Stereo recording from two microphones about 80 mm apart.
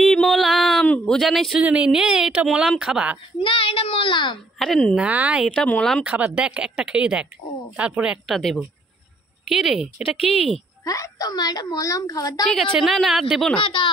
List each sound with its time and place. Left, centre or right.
0.0 s a sound: centre
0.8 s a sound: centre
1.1 s speech: centre
1.6 s speech: centre
3.4 s a child's voice: left
4.6 s speech: centre
4.9 s speech: centre
5.8 s speech: centre
6.0 s speech: centre
8.4 s speech: centre
10.8 s a woman's voice: left
12.7 s speech: centre
13.6 s speech: left